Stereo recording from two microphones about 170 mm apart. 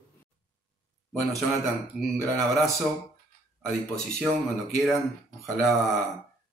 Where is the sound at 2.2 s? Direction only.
Centre (ahead or behind).